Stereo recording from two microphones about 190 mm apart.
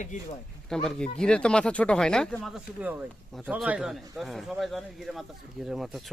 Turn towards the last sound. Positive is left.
turn(degrees=0)  # may be behind; listen again after turning